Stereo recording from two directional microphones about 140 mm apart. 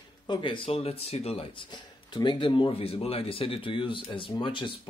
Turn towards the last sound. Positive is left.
turn(degrees=35)  # may be behind; listen again after turning